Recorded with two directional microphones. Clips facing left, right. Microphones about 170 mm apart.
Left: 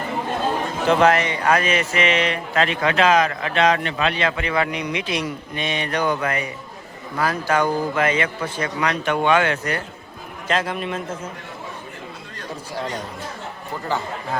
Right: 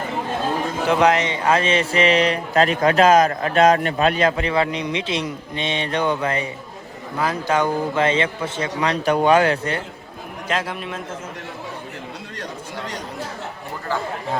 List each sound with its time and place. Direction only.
0.9 s a man's voice: 15° right (ahead or behind); by 9.8 s 30° right (ahead or behind)
10.5 s a man's voice: 5° right (ahead or behind)
13.9 s speech: 20° left (ahead or behind)